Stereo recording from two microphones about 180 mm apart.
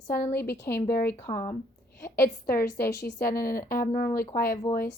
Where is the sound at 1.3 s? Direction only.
25° left (ahead or behind).